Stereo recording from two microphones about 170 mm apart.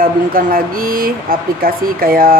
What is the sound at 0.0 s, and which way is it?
Speech, 55° right (ahead or behind).